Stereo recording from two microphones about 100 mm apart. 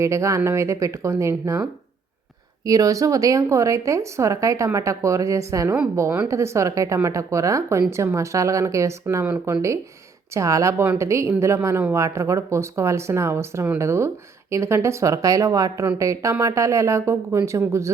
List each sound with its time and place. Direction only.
0.0 s speech: 30° right (ahead or behind)
2.6 s speech: 35° right (ahead or behind)